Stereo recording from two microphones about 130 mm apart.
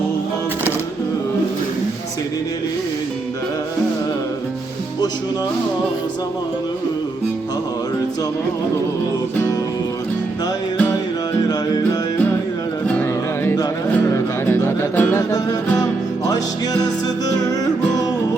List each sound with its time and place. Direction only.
12.9 s music: 15° left (ahead or behind)